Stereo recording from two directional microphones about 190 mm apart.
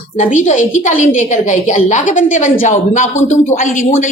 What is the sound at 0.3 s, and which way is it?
A woman's voice, 40° left (ahead or behind).